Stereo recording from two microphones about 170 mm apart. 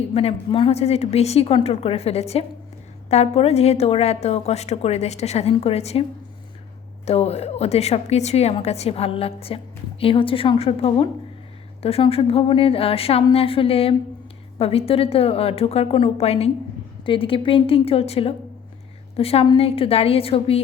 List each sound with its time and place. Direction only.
0.1 s a woman's voice: 35° left (ahead or behind)